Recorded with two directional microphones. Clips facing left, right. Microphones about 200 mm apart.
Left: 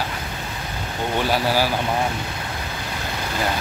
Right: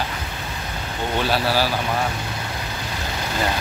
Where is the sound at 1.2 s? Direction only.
15° left (ahead or behind).